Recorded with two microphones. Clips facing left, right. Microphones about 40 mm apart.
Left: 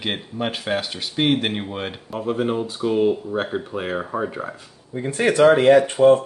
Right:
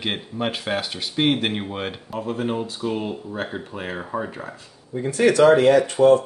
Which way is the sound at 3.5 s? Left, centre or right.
Centre.